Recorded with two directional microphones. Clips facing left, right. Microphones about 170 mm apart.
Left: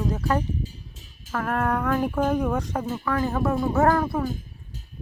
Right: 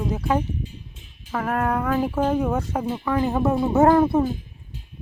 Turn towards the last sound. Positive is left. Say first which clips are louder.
# right 5 dB
turn(degrees=-25)  # may be behind; listen again after turning